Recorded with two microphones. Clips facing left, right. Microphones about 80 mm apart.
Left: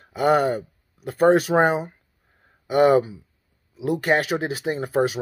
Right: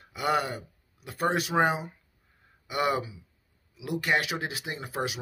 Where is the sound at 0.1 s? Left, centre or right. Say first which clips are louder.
Left 9 dB; left.